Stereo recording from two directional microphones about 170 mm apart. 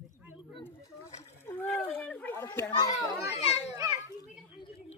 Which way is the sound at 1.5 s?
10° left (ahead or behind).